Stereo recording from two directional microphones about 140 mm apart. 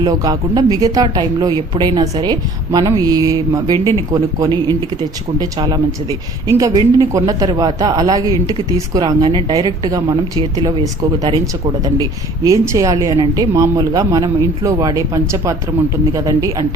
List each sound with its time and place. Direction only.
0.0 s speech: 30° right (ahead or behind)
5.4 s speech: 30° right (ahead or behind)